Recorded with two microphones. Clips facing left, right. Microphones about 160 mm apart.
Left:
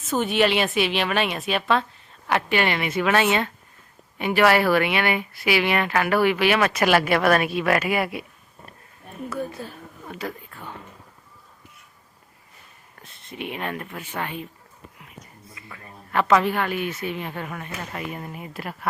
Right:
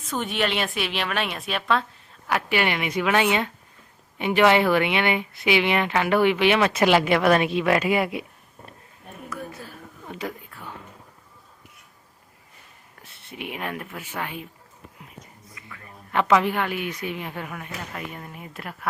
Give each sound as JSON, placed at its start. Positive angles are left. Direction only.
{"t": 0.1, "sound": "a woman's voice", "side_deg": 0}
{"t": 9.3, "sound": "a woman's voice", "side_deg": 30}
{"t": 10.1, "sound": "a woman's voice", "side_deg": -15}
{"t": 13.0, "sound": "speech", "side_deg": -10}
{"t": 15.4, "sound": "a sound", "side_deg": 30}
{"t": 16.1, "sound": "a woman's voice", "side_deg": -15}